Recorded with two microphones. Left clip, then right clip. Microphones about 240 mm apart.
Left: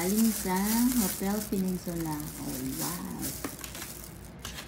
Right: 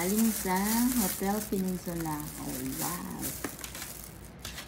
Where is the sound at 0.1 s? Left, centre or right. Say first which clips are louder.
Even; centre.